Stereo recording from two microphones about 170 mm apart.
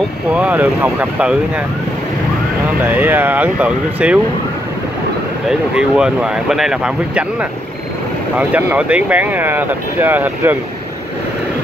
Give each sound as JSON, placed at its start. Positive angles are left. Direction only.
{"t": 0.3, "sound": "speech", "side_deg": -5}
{"t": 2.8, "sound": "speech", "side_deg": -10}
{"t": 5.5, "sound": "speech", "side_deg": -5}
{"t": 8.4, "sound": "speech", "side_deg": -10}